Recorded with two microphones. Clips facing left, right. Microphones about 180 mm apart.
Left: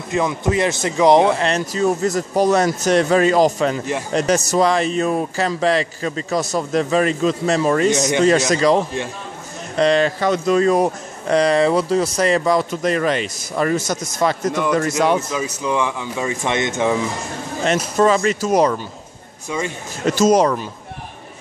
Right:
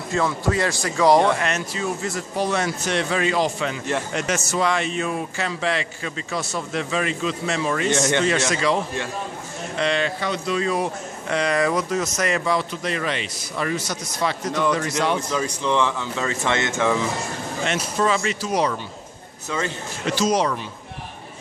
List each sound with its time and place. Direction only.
0.1 s speech: 15° left (ahead or behind)
1.4 s a man's voice: 35° left (ahead or behind)
7.9 s speech: 15° left (ahead or behind)
8.2 s a man's voice: 40° left (ahead or behind)
9.8 s speech: 40° left (ahead or behind)
15.1 s speech: 5° left (ahead or behind)
17.6 s speech: 40° left (ahead or behind)
20.1 s speech: 45° left (ahead or behind)